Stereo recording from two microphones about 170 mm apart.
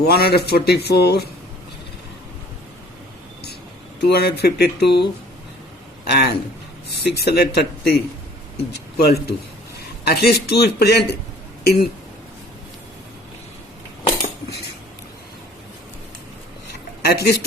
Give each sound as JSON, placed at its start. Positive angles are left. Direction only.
{"t": 0.0, "sound": "speech", "side_deg": 70}
{"t": 4.1, "sound": "speech", "side_deg": 70}
{"t": 6.1, "sound": "speech", "side_deg": 75}
{"t": 17.0, "sound": "speech", "side_deg": 70}